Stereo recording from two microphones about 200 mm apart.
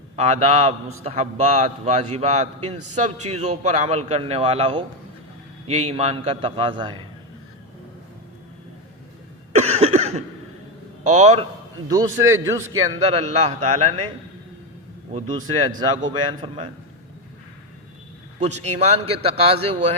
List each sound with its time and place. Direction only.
0.2 s a man's voice: 35° right (ahead or behind)
9.6 s cough: 30° right (ahead or behind)
11.0 s a man's voice: 35° right (ahead or behind)
11.9 s a man's voice: 15° right (ahead or behind)
13.0 s a man's voice: 30° right (ahead or behind)
16.0 s a man's voice: 20° right (ahead or behind)
18.3 s a man's voice: 35° right (ahead or behind)